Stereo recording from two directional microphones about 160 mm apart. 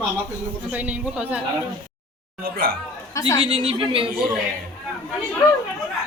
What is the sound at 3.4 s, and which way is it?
Speech, 35° right (ahead or behind).